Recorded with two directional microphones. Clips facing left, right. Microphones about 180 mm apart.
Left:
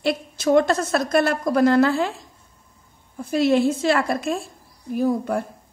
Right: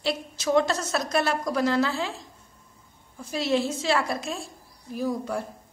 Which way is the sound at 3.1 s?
55° left (ahead or behind).